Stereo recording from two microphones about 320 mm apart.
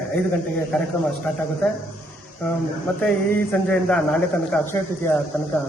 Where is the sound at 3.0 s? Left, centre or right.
Centre.